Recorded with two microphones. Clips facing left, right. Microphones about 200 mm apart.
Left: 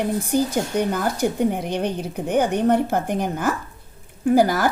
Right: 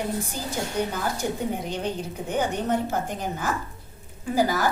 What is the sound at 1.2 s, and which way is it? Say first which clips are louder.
A woman's voice: left 7 dB; 65° left (ahead or behind).